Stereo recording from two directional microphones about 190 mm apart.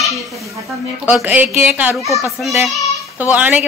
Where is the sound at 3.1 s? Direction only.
10° right (ahead or behind).